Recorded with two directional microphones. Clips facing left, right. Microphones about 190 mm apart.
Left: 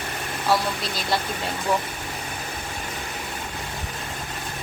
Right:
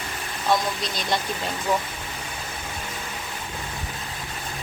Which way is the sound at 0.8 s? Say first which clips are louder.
Even; 5° left (ahead or behind).